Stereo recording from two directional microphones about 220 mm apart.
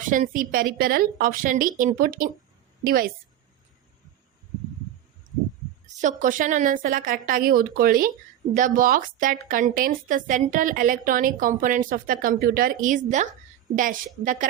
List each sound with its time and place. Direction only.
0.0 s a woman's voice: 35° right (ahead or behind)
5.8 s a woman's voice: 35° right (ahead or behind)